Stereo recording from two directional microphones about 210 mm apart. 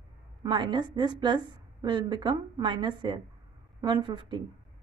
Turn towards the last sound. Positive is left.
turn(degrees=-20)  # may be behind; listen again after turning